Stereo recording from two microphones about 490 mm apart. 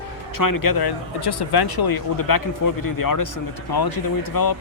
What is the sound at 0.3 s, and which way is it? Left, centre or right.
Speech, left.